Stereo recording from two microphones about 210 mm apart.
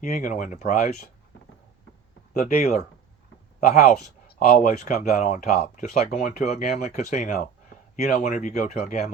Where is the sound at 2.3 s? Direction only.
35° left (ahead or behind).